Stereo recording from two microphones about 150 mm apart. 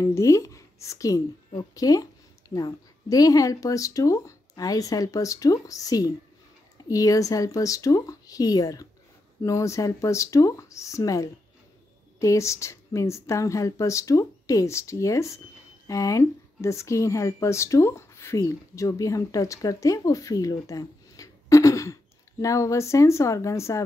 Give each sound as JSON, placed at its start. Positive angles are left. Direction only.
{"t": 0.0, "sound": "a woman's voice", "side_deg": 20}